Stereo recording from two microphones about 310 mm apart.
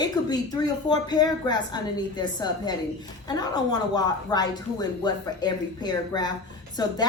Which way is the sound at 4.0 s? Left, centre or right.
Centre.